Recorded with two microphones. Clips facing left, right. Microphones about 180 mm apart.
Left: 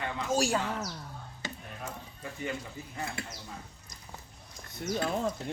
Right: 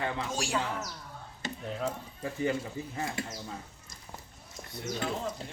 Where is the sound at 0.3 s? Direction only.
40° left (ahead or behind).